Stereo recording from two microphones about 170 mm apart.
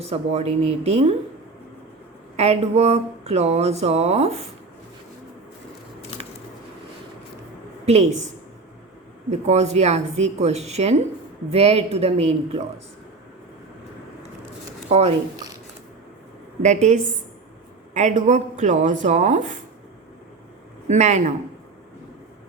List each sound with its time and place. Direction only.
0.0 s speech: 40° right (ahead or behind)
2.3 s speech: 40° right (ahead or behind)
7.9 s speech: 40° right (ahead or behind)
9.3 s speech: 40° right (ahead or behind)
14.8 s speech: 40° right (ahead or behind)
16.6 s speech: 45° right (ahead or behind)
20.8 s speech: 45° right (ahead or behind)